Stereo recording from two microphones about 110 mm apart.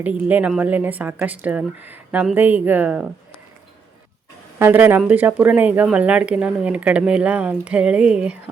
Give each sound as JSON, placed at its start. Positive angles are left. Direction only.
{"t": 0.0, "sound": "speech", "side_deg": -15}
{"t": 4.6, "sound": "speech", "side_deg": -15}